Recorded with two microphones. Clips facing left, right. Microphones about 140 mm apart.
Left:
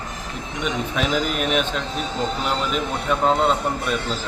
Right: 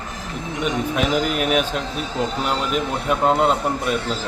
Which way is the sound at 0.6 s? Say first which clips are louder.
Right 2 dB; 5° right (ahead or behind).